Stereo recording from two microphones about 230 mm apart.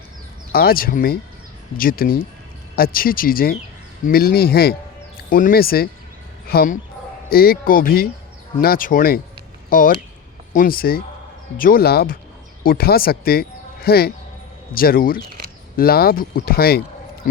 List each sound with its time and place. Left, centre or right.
0.5 s speech: left